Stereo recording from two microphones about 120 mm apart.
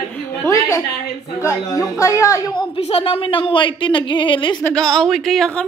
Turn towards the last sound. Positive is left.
turn(degrees=5)  # may be behind; listen again after turning